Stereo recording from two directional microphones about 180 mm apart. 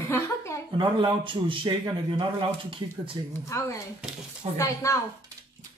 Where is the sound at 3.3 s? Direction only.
15° left (ahead or behind).